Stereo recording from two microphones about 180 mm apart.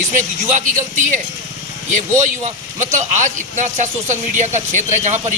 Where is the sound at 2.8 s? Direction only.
45° right (ahead or behind).